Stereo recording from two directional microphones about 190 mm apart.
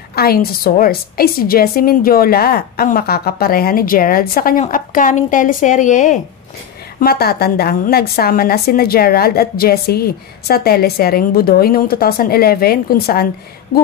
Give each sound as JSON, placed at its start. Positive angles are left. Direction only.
{"t": 0.1, "sound": "a woman's voice", "side_deg": 55}
{"t": 7.0, "sound": "a woman's voice", "side_deg": 55}